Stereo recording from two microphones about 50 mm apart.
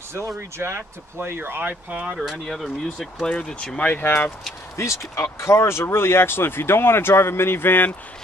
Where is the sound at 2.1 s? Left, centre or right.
Centre.